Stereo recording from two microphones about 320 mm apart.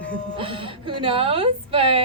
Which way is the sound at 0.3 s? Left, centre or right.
Centre.